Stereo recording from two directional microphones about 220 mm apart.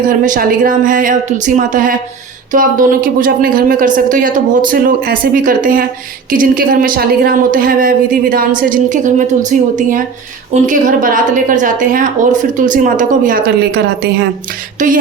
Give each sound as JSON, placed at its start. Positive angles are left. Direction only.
{"t": 0.1, "sound": "a woman's voice", "side_deg": -40}
{"t": 14.8, "sound": "a woman's voice", "side_deg": -35}